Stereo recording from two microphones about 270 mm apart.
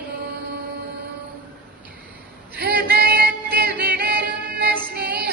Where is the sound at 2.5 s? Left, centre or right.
Right.